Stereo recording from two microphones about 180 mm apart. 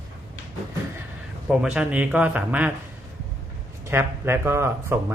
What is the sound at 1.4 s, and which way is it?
A man's voice, 5° right (ahead or behind).